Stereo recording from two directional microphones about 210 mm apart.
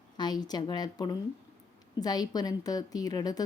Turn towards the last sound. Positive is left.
turn(degrees=20)  # may be behind; listen again after turning